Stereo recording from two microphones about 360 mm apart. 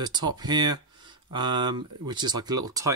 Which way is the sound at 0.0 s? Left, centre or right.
Centre.